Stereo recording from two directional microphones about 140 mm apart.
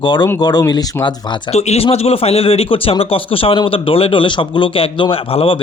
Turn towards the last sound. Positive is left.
turn(degrees=40)  # may be behind; listen again after turning